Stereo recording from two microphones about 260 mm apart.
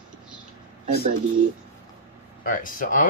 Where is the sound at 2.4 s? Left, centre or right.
Left.